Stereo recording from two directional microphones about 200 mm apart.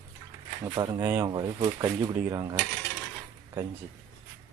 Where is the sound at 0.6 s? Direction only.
15° right (ahead or behind).